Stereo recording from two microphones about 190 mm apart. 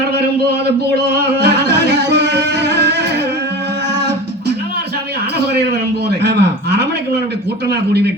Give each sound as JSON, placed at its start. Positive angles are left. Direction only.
{"t": 1.1, "sound": "music", "side_deg": -60}
{"t": 6.1, "sound": "a sound", "side_deg": -65}
{"t": 7.7, "sound": "speech", "side_deg": -60}